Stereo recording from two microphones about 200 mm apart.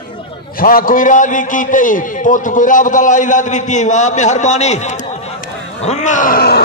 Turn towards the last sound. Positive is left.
turn(degrees=50)  # may be behind; listen again after turning